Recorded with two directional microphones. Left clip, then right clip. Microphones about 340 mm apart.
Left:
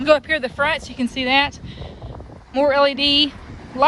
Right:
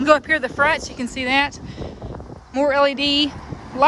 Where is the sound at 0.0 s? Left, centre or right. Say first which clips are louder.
Even; centre.